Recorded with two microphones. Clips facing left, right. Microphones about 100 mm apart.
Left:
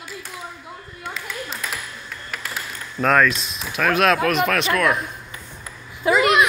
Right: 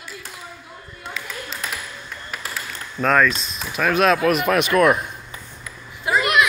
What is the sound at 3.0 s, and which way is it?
Speech, centre (ahead or behind).